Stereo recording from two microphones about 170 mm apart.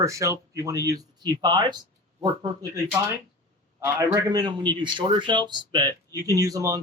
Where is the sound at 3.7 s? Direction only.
15° right (ahead or behind).